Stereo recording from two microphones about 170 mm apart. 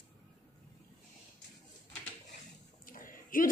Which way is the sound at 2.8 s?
55° left (ahead or behind).